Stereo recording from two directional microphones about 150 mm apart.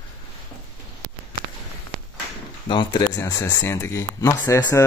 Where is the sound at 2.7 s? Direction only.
30° left (ahead or behind).